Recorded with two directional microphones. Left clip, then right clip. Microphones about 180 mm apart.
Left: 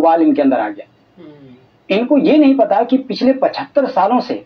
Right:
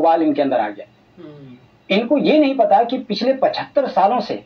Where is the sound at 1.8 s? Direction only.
45° left (ahead or behind).